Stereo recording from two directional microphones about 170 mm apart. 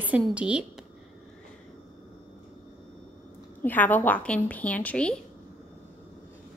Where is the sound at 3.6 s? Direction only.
10° left (ahead or behind).